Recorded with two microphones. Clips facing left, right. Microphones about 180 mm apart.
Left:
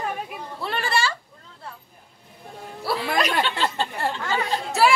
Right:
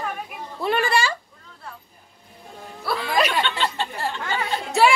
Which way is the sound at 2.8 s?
30° left (ahead or behind).